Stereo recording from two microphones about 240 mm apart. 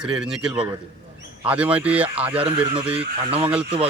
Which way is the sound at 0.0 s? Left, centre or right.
Centre.